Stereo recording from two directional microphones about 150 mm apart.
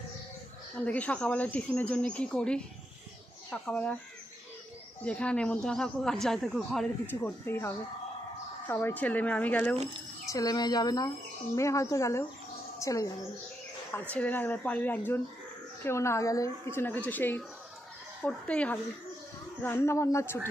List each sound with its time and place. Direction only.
0.7 s speech: 10° left (ahead or behind)
5.0 s speech: 10° left (ahead or behind)
7.1 s speech: 15° left (ahead or behind)
10.2 s a woman's voice: 25° left (ahead or behind)
14.1 s speech: 10° left (ahead or behind)